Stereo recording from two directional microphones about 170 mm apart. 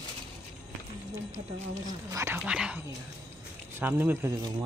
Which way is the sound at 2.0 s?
15° right (ahead or behind).